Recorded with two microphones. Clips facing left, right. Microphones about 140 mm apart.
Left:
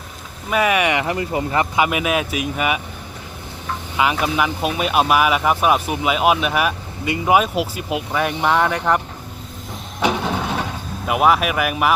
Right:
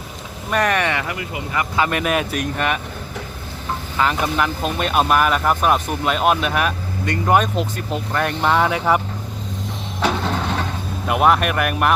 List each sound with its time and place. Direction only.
0.5 s speech: 10° left (ahead or behind)
1.0 s speech: 30° left (ahead or behind)
1.7 s speech: 10° left (ahead or behind)
3.9 s speech: 10° left (ahead or behind)
10.0 s vehicle: 10° left (ahead or behind)